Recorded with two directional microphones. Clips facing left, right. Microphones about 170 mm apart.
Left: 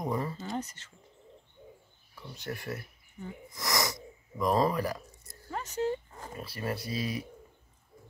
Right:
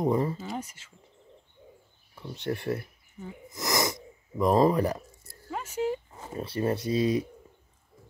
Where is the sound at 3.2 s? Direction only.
Centre (ahead or behind).